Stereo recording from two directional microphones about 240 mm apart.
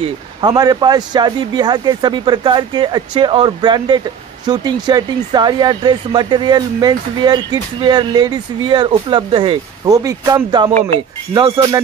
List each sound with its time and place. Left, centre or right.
0.4 s a man's voice: centre